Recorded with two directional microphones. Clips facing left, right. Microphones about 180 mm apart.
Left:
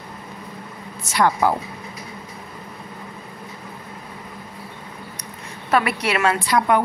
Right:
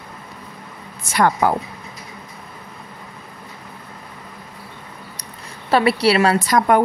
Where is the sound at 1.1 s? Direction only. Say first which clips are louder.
Right 1 dB; 50° right (ahead or behind).